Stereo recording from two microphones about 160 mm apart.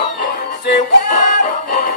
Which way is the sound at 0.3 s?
60° left (ahead or behind).